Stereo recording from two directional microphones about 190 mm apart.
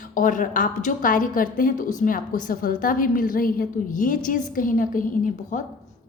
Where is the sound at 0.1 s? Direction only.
45° left (ahead or behind).